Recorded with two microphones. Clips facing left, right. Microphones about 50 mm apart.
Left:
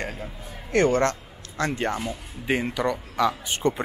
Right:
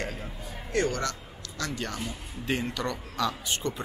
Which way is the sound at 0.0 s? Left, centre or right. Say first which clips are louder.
Left 2 dB; left.